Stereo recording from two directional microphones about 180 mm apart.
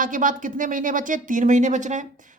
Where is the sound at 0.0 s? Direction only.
45° right (ahead or behind).